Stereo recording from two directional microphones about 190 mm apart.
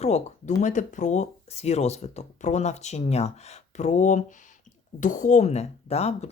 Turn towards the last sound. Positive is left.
turn(degrees=35)  # may be behind; listen again after turning